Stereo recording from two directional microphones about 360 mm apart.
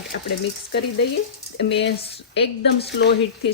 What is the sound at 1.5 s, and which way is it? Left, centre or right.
Speech, left.